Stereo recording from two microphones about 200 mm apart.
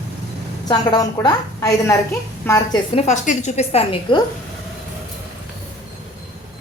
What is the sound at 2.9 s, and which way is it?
A woman's voice, 35° left (ahead or behind).